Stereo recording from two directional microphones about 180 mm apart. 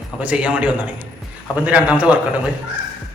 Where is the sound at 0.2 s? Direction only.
5° right (ahead or behind).